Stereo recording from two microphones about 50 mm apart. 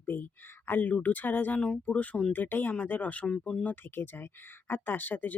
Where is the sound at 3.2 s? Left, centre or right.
Centre.